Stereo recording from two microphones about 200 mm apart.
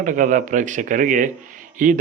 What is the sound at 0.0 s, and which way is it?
Speech, 40° right (ahead or behind).